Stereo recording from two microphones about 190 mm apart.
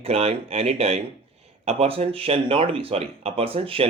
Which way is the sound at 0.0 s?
30° right (ahead or behind).